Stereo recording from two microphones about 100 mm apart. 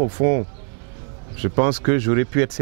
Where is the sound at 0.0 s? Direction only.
15° right (ahead or behind).